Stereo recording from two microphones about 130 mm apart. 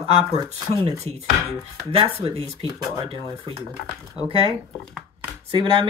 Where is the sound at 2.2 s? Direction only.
50° right (ahead or behind).